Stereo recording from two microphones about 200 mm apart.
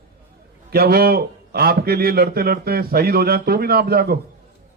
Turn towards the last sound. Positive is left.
turn(degrees=-50)  # may be behind; listen again after turning